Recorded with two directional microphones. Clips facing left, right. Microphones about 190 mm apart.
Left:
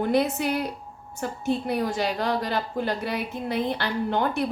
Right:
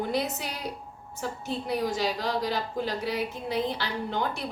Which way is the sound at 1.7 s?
55° left (ahead or behind).